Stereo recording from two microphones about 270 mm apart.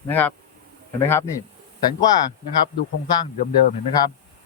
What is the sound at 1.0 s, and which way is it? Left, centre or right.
Speech, centre.